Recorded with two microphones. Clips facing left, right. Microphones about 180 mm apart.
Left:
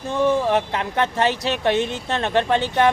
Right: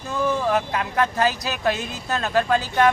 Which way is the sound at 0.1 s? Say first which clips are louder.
Left 3 dB; 30° left (ahead or behind).